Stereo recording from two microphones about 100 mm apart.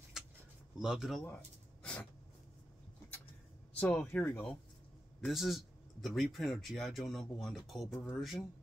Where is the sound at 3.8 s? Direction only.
15° left (ahead or behind).